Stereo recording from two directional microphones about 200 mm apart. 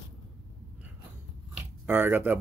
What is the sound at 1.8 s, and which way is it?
Speech, 10° right (ahead or behind).